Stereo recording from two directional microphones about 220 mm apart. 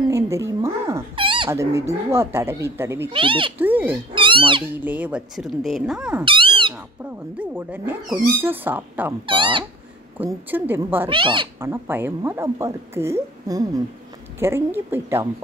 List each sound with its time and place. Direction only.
0.1 s a sound: 15° right (ahead or behind)
1.1 s speech: 20° right (ahead or behind)
3.1 s speech: 25° right (ahead or behind)
3.5 s speech: 10° right (ahead or behind)
4.1 s speech: 20° right (ahead or behind)
4.7 s speech: 5° right (ahead or behind)
6.2 s cat: 25° right (ahead or behind)
7.1 s speech: 10° right (ahead or behind)
9.2 s speech: 20° right (ahead or behind)
10.2 s speech: 10° right (ahead or behind)
11.1 s speech: 20° right (ahead or behind)